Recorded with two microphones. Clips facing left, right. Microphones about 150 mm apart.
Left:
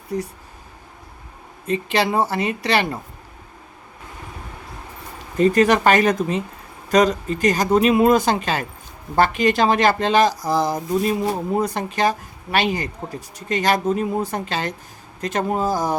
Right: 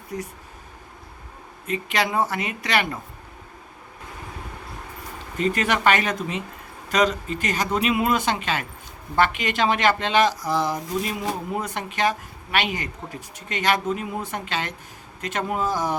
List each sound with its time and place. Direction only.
1.6 s speech: 30° left (ahead or behind)
5.4 s speech: 40° left (ahead or behind)